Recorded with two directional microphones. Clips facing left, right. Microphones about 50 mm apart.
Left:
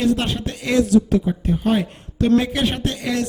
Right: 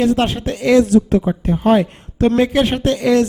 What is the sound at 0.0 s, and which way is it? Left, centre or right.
Speech, right.